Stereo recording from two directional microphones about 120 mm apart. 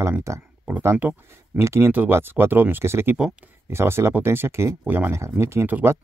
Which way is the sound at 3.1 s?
10° right (ahead or behind).